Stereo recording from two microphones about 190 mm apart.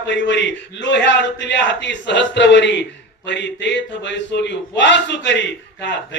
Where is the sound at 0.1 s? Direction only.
70° left (ahead or behind).